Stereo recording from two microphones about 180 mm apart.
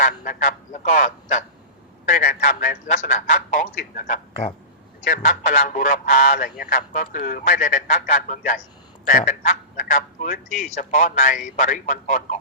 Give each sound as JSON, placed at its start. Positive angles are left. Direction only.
{"t": 0.0, "sound": "a man's voice", "side_deg": 50}